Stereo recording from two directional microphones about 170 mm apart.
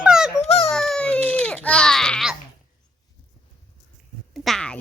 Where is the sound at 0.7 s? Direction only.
5° left (ahead or behind).